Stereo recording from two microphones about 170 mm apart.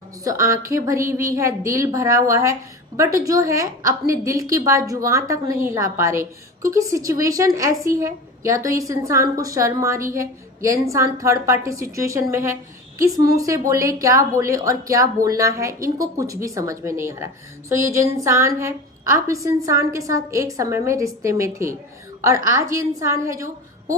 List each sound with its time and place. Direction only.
0.3 s a woman's voice: 20° right (ahead or behind)